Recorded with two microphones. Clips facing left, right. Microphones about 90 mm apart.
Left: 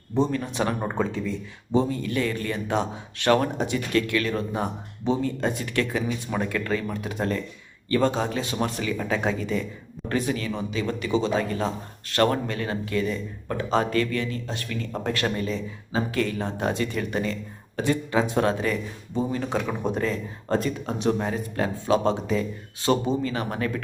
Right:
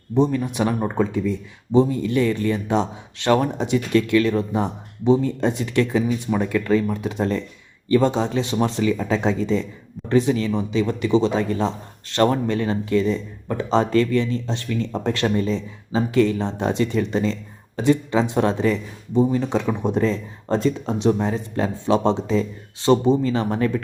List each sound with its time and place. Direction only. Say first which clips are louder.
0.1 s speech: right 5 dB; 15° right (ahead or behind)
0.8 s speech: right 5 dB; centre (ahead or behind)
1.1 s speech: right 6 dB; 20° right (ahead or behind)